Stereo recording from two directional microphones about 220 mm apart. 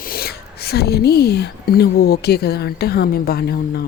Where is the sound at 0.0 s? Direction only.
45° left (ahead or behind).